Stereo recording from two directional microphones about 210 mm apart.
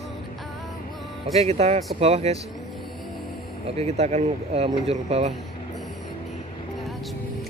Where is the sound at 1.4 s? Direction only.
30° right (ahead or behind).